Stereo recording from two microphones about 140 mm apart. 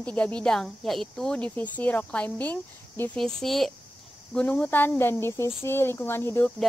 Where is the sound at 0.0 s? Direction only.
10° left (ahead or behind).